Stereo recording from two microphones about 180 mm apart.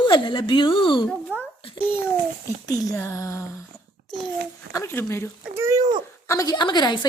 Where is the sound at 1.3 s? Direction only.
10° right (ahead or behind).